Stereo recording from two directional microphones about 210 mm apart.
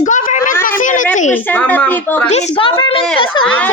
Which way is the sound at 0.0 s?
40° left (ahead or behind).